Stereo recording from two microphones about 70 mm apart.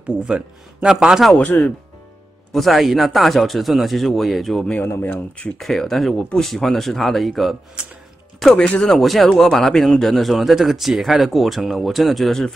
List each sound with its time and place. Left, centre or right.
0.0 s a man's voice: centre
1.3 s speech: left
2.5 s speech: centre
5.0 s speech: left
5.6 s speech: centre
7.8 s a man's voice: centre
8.4 s speech: centre
8.8 s speech: centre